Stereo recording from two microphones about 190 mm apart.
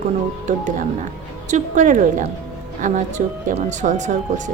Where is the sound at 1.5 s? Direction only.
40° right (ahead or behind).